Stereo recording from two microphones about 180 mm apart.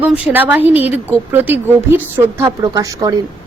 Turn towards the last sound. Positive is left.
turn(degrees=-20)  # may be behind; listen again after turning